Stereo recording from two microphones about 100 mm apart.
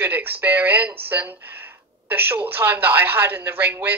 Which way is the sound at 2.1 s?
20° right (ahead or behind).